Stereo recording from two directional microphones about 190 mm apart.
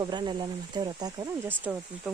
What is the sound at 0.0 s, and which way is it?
Speech, 25° right (ahead or behind).